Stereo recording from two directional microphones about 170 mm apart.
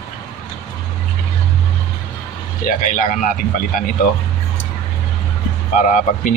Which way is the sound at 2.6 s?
50° left (ahead or behind).